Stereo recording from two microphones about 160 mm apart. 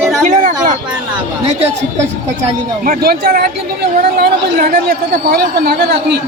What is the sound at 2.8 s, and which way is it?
Speech, 70° right (ahead or behind).